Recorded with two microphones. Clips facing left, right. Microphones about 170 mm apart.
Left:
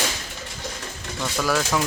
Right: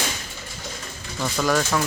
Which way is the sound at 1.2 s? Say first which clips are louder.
Right 2 dB; centre (ahead or behind).